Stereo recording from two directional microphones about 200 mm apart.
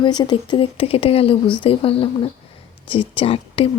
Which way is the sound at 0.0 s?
20° left (ahead or behind).